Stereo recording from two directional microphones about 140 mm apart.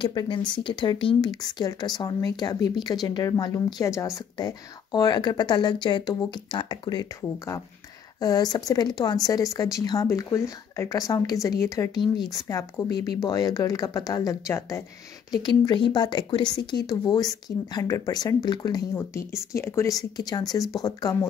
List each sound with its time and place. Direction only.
0.0 s speech: 35° left (ahead or behind); by 14.9 s 20° left (ahead or behind)
15.3 s speech: 30° left (ahead or behind)
18.9 s speech: 20° left (ahead or behind)